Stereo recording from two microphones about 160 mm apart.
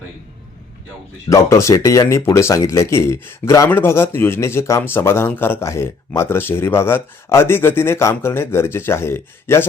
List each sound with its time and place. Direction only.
1.3 s speech: 20° left (ahead or behind)